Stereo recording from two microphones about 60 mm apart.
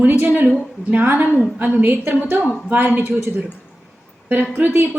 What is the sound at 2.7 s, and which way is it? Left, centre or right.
Speech, right.